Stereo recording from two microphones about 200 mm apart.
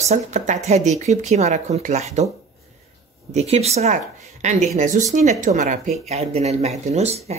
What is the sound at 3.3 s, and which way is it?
Speech, 30° right (ahead or behind).